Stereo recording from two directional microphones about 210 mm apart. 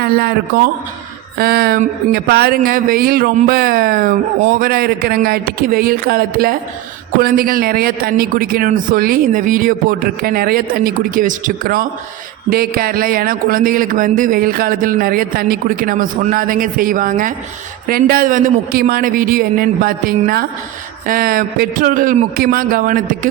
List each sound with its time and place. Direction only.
0.0 s a man's voice: 45° right (ahead or behind)